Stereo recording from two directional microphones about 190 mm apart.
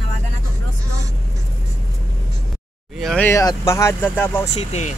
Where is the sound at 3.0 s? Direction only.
Centre (ahead or behind).